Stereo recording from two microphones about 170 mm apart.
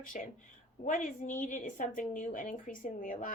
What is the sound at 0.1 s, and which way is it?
A woman's voice, 50° left (ahead or behind).